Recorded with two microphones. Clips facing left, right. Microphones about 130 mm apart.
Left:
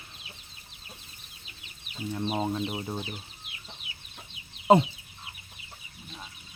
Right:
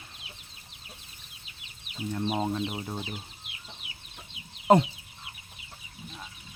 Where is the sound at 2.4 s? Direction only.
5° left (ahead or behind).